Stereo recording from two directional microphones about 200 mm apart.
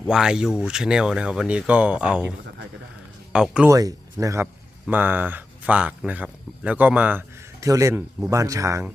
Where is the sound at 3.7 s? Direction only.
15° right (ahead or behind).